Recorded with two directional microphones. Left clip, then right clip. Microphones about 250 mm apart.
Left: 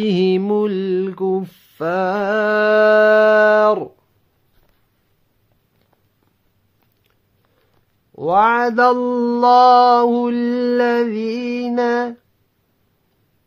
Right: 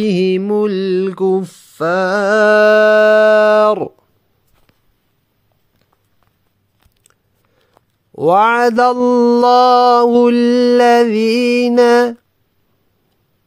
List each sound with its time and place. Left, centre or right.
0.0 s mantra: centre; by 3.9 s right
8.1 s mantra: right